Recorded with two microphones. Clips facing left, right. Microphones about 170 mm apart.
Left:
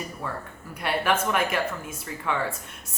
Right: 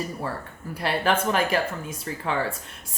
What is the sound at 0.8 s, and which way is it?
Speech, 30° right (ahead or behind).